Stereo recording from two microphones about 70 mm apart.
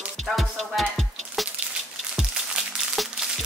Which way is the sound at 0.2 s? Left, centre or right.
Centre.